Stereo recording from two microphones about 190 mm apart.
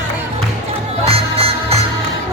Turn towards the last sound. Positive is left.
turn(degrees=-30)  # may be behind; listen again after turning